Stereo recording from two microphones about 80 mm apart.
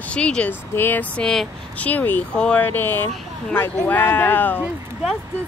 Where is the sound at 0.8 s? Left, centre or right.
Left.